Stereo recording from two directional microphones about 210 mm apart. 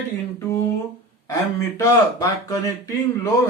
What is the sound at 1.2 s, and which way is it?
Speech, 15° left (ahead or behind).